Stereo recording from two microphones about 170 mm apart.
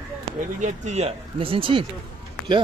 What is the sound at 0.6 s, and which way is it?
Speech, 45° right (ahead or behind).